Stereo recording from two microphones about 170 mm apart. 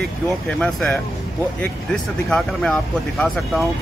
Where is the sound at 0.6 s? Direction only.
5° left (ahead or behind).